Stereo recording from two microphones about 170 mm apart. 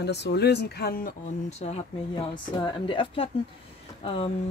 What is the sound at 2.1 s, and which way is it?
A woman's voice, 30° left (ahead or behind).